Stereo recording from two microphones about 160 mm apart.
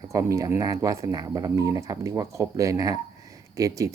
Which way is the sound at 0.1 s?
20° right (ahead or behind).